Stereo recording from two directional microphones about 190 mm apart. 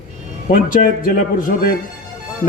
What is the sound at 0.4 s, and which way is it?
A man's voice, 45° left (ahead or behind).